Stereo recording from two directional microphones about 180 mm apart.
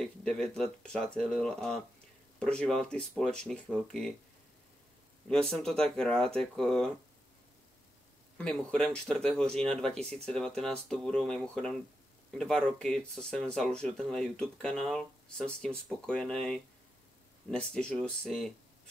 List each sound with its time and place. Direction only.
0.0 s speech: 5° left (ahead or behind)
5.5 s speech: 5° left (ahead or behind)
8.4 s speech: 5° left (ahead or behind)